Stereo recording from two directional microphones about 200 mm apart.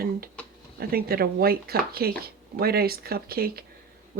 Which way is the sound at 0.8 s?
50° right (ahead or behind).